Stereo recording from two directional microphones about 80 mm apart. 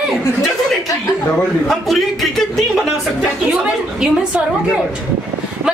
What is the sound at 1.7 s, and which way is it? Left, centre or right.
A man's voice, centre.